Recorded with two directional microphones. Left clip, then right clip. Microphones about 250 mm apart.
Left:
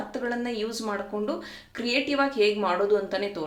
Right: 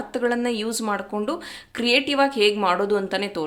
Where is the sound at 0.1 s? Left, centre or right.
Right.